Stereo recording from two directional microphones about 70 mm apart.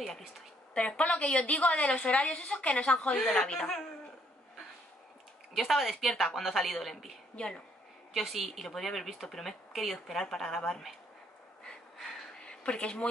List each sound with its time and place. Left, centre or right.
0.7 s a woman's voice: centre
3.2 s a woman's voice: centre
5.5 s a woman's voice: centre
7.3 s a woman's voice: centre
8.1 s a woman's voice: centre
11.6 s a sound: centre